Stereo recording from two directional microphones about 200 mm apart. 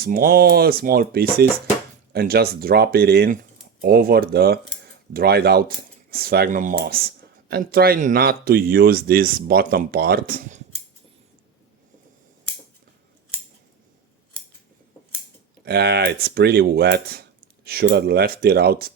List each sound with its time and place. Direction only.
0.0 s speech: 45° right (ahead or behind)
15.6 s speech: 55° right (ahead or behind)